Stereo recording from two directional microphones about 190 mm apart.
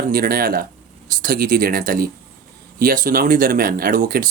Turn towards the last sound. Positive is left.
turn(degrees=-50)  # may be behind; listen again after turning